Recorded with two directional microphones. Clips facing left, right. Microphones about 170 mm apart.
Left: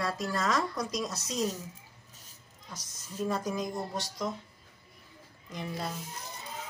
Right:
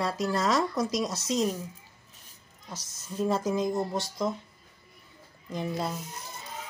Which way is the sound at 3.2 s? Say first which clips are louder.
Right 5 dB; 25° right (ahead or behind).